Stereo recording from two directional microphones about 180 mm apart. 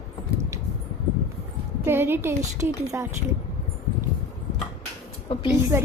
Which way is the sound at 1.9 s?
10° right (ahead or behind).